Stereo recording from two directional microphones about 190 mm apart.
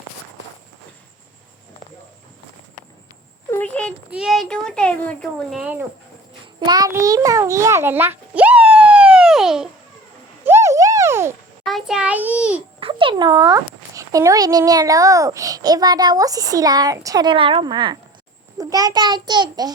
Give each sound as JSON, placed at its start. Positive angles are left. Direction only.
{"t": 3.5, "sound": "a sound", "side_deg": 10}
{"t": 4.1, "sound": "speech", "side_deg": 0}
{"t": 6.7, "sound": "a child's voice", "side_deg": -20}
{"t": 10.4, "sound": "a sound", "side_deg": -15}
{"t": 11.6, "sound": "a child's voice", "side_deg": 0}
{"t": 12.8, "sound": "a child's voice", "side_deg": -25}